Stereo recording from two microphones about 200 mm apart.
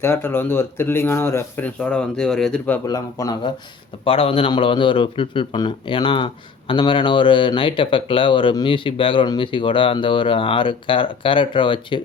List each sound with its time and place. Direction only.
0.0 s a man's voice: 10° left (ahead or behind)